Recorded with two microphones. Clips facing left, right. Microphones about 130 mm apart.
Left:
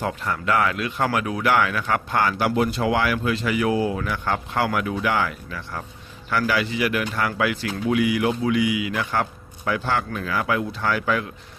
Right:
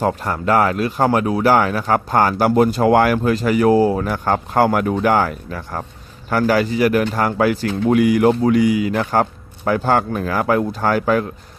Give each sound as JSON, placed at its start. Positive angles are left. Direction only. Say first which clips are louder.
{"t": 0.0, "sound": "speech", "louder": "right 6 dB", "side_deg": -40}